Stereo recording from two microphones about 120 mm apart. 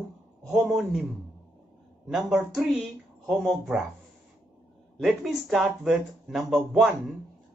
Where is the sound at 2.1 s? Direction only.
Centre (ahead or behind).